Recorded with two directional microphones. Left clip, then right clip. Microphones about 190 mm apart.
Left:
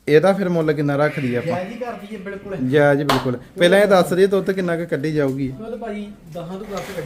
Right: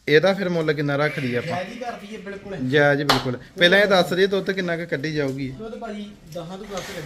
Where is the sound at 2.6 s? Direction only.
15° left (ahead or behind).